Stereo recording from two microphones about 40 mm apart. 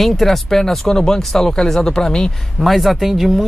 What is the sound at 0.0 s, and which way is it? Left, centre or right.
Speech, centre.